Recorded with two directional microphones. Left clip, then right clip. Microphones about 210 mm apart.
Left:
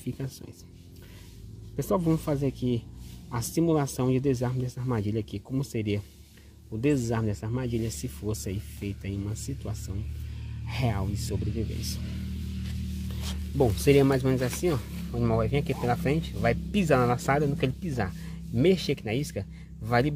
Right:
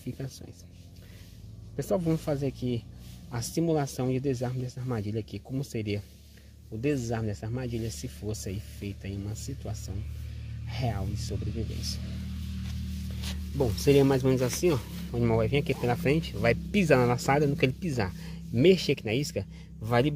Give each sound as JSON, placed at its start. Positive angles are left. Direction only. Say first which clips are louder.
{"t": 0.2, "sound": "speech", "louder": "left 2 dB", "side_deg": 10}
{"t": 1.8, "sound": "speech", "louder": "left 2 dB", "side_deg": 5}
{"t": 13.2, "sound": "music", "louder": "left 4 dB", "side_deg": 15}
{"t": 13.8, "sound": "speech", "louder": "right 1 dB", "side_deg": -5}